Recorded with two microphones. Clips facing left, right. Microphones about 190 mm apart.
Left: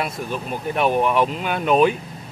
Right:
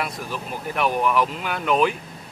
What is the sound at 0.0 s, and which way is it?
Speech, 25° left (ahead or behind).